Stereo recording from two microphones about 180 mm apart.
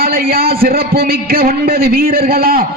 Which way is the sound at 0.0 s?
55° right (ahead or behind).